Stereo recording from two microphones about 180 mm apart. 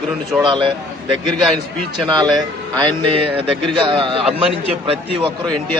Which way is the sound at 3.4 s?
30° right (ahead or behind).